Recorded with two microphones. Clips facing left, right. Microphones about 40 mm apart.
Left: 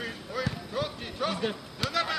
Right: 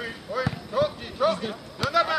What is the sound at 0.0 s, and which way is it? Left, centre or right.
Basketball bounce, centre.